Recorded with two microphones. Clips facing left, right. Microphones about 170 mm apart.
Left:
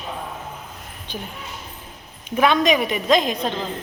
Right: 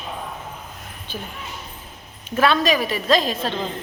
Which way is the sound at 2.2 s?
15° left (ahead or behind).